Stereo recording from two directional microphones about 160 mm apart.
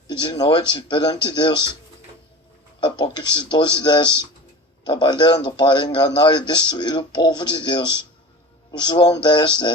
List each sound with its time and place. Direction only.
0.1 s a man's voice: 25° left (ahead or behind)
2.8 s a man's voice: 25° left (ahead or behind)